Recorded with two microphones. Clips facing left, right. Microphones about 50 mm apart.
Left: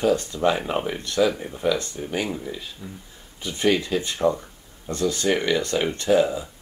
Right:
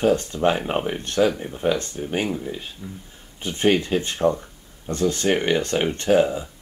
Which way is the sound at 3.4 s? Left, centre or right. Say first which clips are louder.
Right 2 dB; right.